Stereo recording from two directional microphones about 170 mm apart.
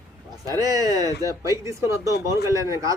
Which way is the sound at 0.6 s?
20° right (ahead or behind).